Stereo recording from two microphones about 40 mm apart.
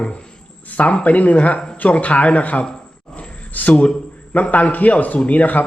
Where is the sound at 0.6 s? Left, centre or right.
Left.